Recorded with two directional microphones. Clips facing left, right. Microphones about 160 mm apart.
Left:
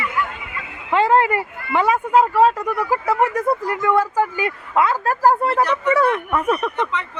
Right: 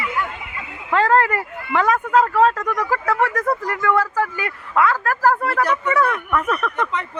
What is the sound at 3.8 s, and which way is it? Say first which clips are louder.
Speech: left 1 dB; 20° left (ahead or behind).